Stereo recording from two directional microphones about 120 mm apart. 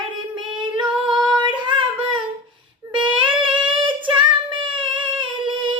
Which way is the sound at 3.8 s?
45° right (ahead or behind).